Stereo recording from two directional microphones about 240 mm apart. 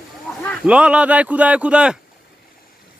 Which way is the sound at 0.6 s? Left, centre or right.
Centre.